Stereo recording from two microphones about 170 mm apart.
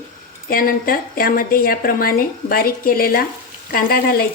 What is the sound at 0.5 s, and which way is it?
Speech, 60° left (ahead or behind).